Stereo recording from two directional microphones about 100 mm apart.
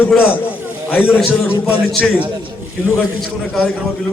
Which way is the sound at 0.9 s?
10° right (ahead or behind).